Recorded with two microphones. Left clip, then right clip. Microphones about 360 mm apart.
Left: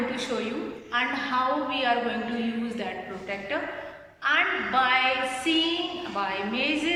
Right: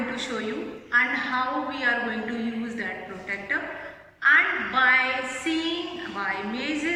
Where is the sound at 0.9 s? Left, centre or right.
Centre.